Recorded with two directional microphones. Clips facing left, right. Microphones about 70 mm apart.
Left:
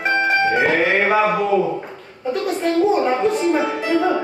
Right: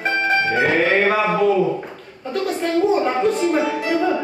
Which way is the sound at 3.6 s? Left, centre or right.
Left.